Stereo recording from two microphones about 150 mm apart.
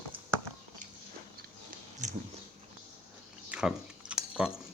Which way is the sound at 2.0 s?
55° right (ahead or behind).